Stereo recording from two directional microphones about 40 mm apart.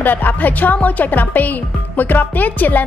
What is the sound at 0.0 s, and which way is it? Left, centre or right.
A woman's voice, left.